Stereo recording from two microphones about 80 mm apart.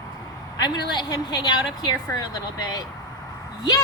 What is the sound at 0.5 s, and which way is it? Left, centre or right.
A woman's voice, left.